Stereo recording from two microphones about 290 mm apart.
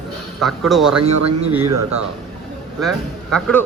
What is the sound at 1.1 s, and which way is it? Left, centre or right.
Speech, right.